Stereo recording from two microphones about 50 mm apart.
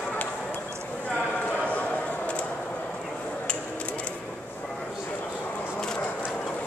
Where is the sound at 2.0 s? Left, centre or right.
Left.